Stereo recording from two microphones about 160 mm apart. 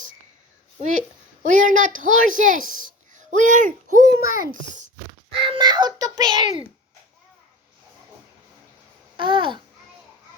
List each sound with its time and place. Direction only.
1.4 s a woman's voice: 50° right (ahead or behind)
5.4 s a child's voice: 30° right (ahead or behind)
9.1 s a child's voice: 30° right (ahead or behind)